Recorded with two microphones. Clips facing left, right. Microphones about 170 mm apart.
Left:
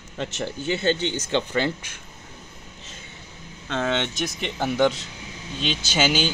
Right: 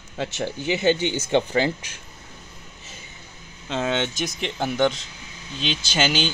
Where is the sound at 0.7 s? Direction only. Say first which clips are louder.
Right 2 dB; 10° right (ahead or behind).